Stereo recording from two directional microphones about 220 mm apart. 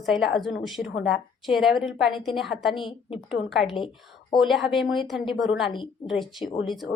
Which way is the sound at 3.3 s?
Centre (ahead or behind).